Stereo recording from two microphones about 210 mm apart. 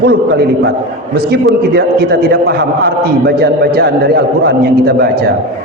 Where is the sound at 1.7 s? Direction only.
50° right (ahead or behind).